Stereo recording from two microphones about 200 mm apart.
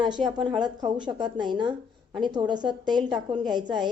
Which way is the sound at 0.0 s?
20° right (ahead or behind).